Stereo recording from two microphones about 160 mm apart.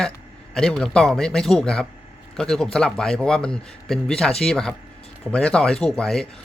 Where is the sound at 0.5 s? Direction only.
5° left (ahead or behind).